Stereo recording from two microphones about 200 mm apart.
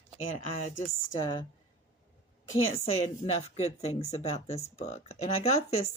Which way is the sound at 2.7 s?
30° left (ahead or behind).